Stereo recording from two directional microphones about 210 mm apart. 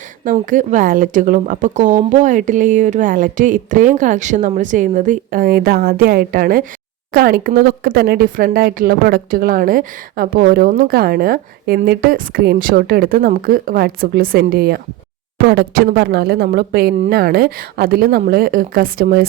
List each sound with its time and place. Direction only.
0.3 s a woman's voice: 40° right (ahead or behind)